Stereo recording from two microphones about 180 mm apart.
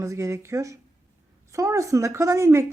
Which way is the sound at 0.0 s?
15° right (ahead or behind).